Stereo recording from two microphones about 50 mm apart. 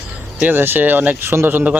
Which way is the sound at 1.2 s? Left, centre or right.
Right.